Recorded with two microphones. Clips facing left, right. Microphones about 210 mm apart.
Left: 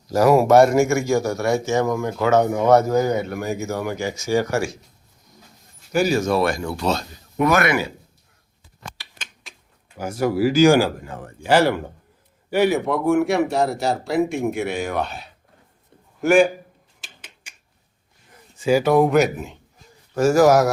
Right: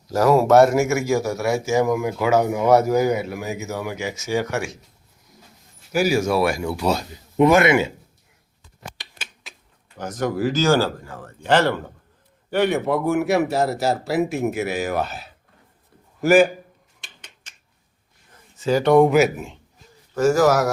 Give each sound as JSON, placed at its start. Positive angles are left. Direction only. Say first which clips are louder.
{"t": 0.2, "sound": "speech", "louder": "left 1 dB", "side_deg": 15}
{"t": 0.6, "sound": "a man's voice", "louder": "left 1 dB", "side_deg": -5}
{"t": 5.9, "sound": "speech", "louder": "even", "side_deg": -10}
{"t": 7.3, "sound": "a man's voice", "louder": "right 4 dB", "side_deg": -25}
{"t": 9.1, "sound": "typewriter", "louder": "right 2 dB", "side_deg": -5}
{"t": 10.0, "sound": "a man's voice", "louder": "left 3 dB", "side_deg": 10}
{"t": 17.0, "sound": "typewriter", "louder": "left 2 dB", "side_deg": 5}
{"t": 18.6, "sound": "a man's voice", "louder": "right 1 dB", "side_deg": 10}
{"t": 20.1, "sound": "speech", "louder": "left 2 dB", "side_deg": 10}